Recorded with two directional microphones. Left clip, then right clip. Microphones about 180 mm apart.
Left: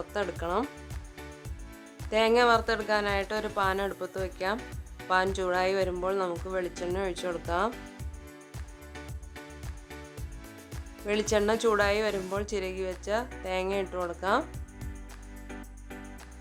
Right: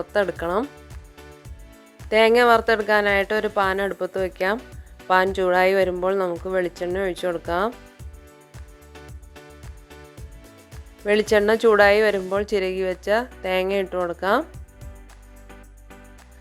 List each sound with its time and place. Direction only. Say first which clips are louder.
0.1 s speech: right 9 dB; 35° right (ahead or behind)
2.0 s a woman's voice: right 8 dB; 30° right (ahead or behind)
11.0 s a woman's voice: right 9 dB; 30° right (ahead or behind)